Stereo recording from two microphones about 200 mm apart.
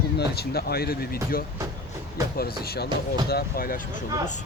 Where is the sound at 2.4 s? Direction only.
50° left (ahead or behind).